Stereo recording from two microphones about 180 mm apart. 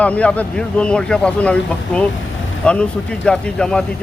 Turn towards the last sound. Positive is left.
turn(degrees=5)  # may be behind; listen again after turning